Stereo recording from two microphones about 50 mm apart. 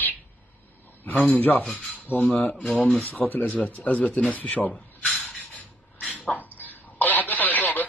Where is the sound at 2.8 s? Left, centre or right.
Centre.